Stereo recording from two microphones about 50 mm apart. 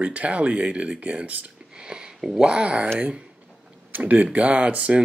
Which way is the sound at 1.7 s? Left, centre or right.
Centre.